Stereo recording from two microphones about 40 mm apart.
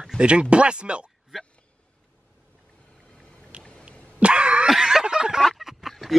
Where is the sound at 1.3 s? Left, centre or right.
Centre.